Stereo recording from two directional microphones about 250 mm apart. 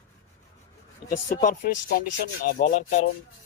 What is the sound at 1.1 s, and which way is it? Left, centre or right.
Speech, left.